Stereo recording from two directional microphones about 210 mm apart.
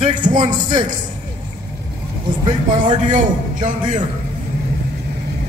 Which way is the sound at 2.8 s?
35° right (ahead or behind).